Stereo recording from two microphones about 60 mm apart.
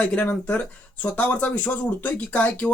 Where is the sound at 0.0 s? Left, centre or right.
Left.